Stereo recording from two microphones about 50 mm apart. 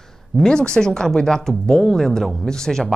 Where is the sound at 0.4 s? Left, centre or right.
Centre.